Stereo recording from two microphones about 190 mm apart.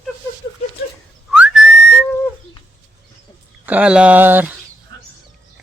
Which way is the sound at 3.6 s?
5° right (ahead or behind).